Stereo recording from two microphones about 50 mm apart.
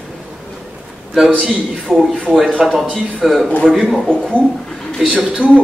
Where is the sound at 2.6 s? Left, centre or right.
Centre.